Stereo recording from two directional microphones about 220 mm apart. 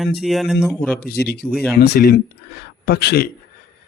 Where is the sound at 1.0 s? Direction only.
45° left (ahead or behind).